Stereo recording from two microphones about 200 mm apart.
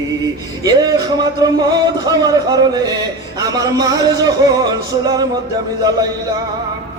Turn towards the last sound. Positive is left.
turn(degrees=-20)  # may be behind; listen again after turning